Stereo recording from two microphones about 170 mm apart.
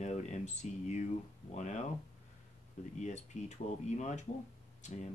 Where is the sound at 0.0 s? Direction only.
40° left (ahead or behind).